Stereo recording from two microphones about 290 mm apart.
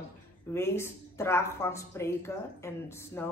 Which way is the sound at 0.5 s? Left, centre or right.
Centre.